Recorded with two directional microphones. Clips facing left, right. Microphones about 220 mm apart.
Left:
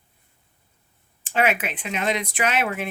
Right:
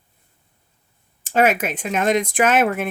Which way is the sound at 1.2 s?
45° right (ahead or behind).